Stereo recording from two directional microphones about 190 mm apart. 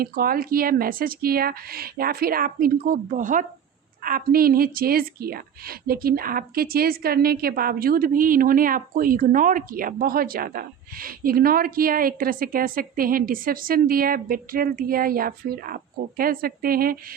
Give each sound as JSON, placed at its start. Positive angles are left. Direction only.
{"t": 0.0, "sound": "a woman's voice", "side_deg": -50}